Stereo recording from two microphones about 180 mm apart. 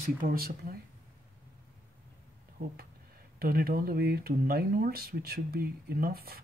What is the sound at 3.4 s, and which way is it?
Speech, 55° right (ahead or behind).